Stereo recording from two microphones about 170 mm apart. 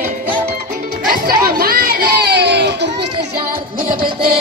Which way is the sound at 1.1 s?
60° right (ahead or behind).